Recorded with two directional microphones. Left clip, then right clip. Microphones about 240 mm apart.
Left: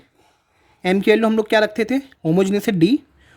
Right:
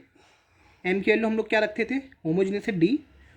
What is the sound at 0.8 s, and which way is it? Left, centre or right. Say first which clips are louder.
Speech: left 7 dB; left.